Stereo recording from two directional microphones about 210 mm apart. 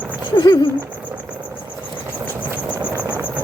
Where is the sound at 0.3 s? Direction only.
20° left (ahead or behind).